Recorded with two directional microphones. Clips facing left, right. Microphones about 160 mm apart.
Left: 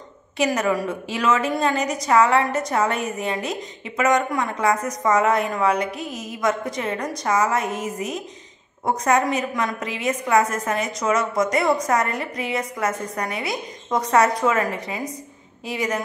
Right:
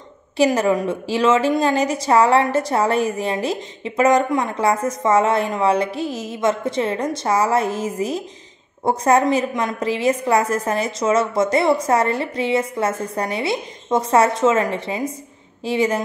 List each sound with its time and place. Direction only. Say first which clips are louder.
0.6 s a woman's voice: right 4 dB; 25° right (ahead or behind)